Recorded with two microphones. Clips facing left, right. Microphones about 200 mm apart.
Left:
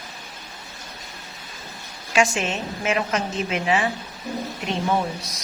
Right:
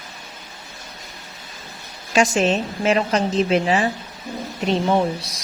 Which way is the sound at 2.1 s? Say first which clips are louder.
Right 4 dB; 35° right (ahead or behind).